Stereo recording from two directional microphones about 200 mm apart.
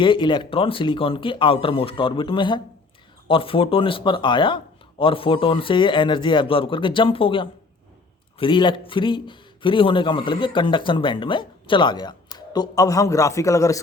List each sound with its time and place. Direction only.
0.0 s a man's voice: 25° left (ahead or behind)